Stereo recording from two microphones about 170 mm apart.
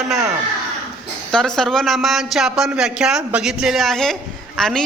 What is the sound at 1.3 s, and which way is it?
A woman's voice, 5° left (ahead or behind).